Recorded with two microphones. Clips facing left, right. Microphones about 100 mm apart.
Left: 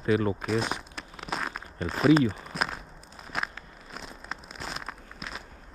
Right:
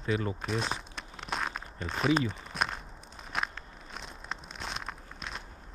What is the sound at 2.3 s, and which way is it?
Walk, centre (ahead or behind).